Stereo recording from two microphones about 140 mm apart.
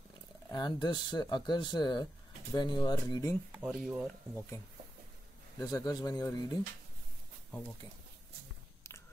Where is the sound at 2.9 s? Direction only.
20° left (ahead or behind).